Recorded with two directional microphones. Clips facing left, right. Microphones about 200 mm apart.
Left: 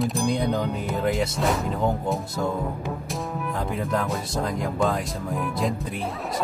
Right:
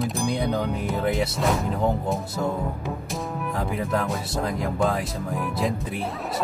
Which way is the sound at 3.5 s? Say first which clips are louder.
Right 1 dB; 5° right (ahead or behind).